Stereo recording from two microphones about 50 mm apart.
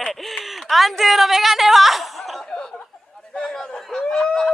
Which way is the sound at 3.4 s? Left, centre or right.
Centre.